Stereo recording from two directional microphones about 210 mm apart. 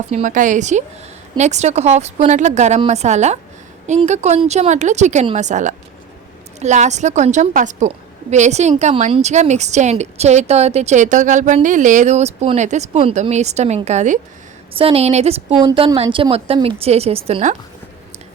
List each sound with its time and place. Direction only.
0.1 s a woman's voice: 35° right (ahead or behind)